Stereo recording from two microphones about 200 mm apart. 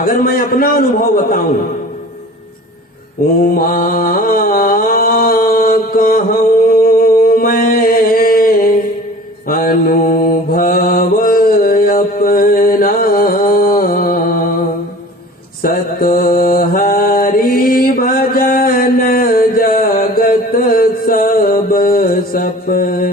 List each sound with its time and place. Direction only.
0.0 s a man's voice: 45° left (ahead or behind)
3.5 s mantra: 45° left (ahead or behind)
15.6 s mantra: 45° left (ahead or behind)